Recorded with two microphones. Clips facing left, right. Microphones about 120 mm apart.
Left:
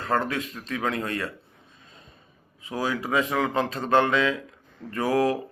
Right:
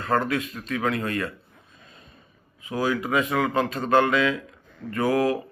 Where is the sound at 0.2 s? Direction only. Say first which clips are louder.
Right 3 dB; 25° left (ahead or behind).